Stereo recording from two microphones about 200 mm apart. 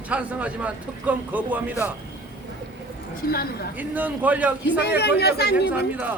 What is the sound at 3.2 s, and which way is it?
Speech, 50° left (ahead or behind).